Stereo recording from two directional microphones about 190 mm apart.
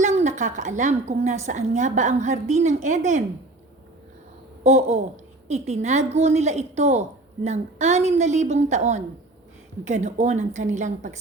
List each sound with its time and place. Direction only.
0.0 s a woman's voice: 35° right (ahead or behind)
4.6 s a woman's voice: 35° right (ahead or behind)